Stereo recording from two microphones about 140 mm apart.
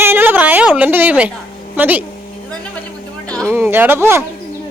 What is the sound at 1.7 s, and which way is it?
Speech, 15° right (ahead or behind).